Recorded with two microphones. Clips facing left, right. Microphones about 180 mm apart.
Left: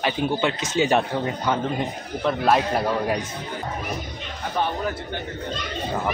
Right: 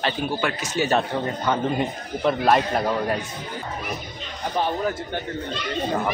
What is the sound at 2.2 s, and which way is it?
Speech, centre (ahead or behind).